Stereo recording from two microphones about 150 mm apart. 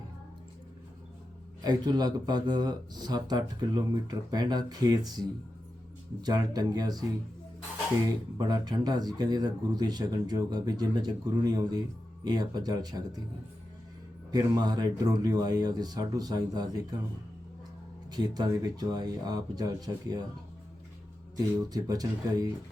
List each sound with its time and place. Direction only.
1.6 s speech: 25° right (ahead or behind)
6.2 s speech: 25° right (ahead or behind)
8.4 s speech: 25° right (ahead or behind)
14.3 s speech: 25° right (ahead or behind)
18.1 s speech: 25° right (ahead or behind)
21.7 s speech: 25° right (ahead or behind)